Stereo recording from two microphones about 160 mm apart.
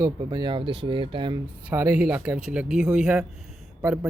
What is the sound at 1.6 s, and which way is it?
Speech, 15° right (ahead or behind).